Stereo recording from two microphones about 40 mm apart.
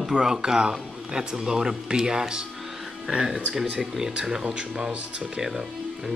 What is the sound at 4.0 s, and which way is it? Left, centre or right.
Speech, right.